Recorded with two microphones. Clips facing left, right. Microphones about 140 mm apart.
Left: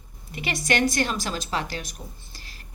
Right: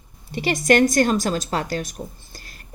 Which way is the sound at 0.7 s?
45° right (ahead or behind).